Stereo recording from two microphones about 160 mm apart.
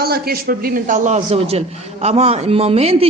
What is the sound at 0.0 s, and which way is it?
A man's voice, 75° right (ahead or behind).